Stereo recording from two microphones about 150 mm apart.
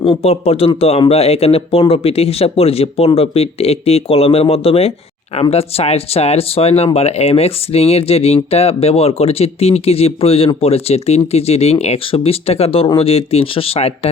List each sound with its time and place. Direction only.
0.1 s speech: 40° left (ahead or behind)